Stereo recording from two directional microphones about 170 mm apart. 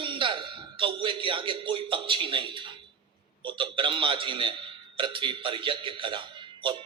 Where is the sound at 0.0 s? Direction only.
30° right (ahead or behind).